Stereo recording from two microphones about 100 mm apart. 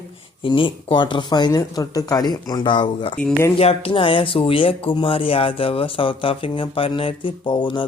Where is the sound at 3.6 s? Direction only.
75° left (ahead or behind).